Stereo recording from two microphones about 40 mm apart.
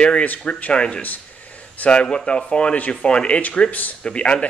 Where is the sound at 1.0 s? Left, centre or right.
Left.